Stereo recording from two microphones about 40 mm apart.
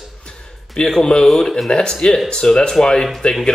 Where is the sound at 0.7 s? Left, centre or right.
Centre.